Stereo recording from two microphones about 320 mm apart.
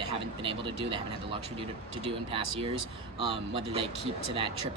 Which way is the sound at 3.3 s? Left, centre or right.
Centre.